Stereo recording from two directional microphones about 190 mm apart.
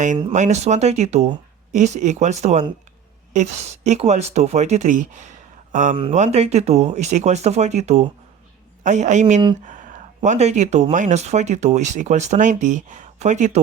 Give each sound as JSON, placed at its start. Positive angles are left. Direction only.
{"t": 0.3, "sound": "speech", "side_deg": -40}